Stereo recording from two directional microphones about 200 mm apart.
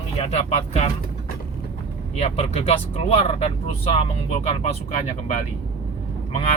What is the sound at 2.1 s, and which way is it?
Speech, 30° left (ahead or behind).